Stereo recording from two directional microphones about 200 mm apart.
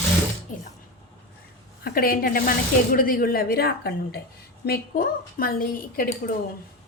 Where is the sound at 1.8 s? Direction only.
50° left (ahead or behind).